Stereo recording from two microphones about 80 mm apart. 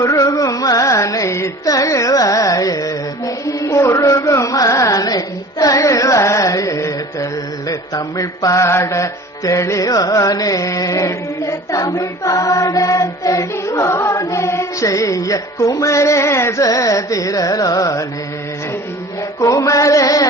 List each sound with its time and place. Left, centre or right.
0.0 s carnatic music: left
0.4 s mantra: left
19.4 s mantra: left